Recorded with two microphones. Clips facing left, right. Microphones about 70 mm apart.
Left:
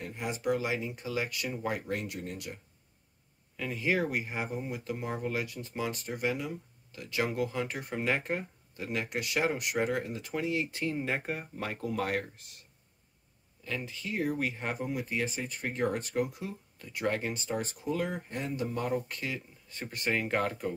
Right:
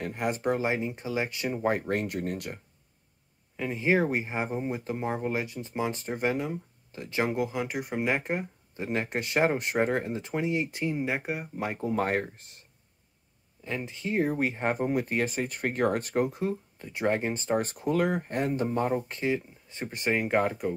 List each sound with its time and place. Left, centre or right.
0.0 s speech: right
3.5 s speech: right
11.9 s speech: right
13.7 s speech: right